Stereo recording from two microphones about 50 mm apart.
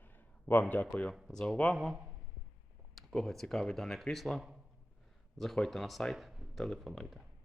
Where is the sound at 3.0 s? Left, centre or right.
Centre.